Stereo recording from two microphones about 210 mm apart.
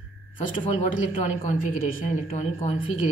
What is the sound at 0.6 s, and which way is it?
Speech, 35° left (ahead or behind).